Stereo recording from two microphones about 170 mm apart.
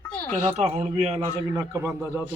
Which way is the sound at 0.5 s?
40° right (ahead or behind).